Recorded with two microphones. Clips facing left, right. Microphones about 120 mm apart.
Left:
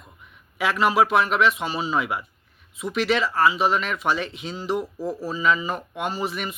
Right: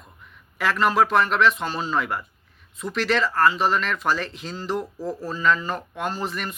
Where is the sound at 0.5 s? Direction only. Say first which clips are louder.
Even; centre (ahead or behind).